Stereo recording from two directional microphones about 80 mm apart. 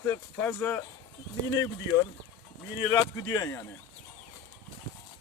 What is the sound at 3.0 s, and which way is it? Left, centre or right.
Speech, left.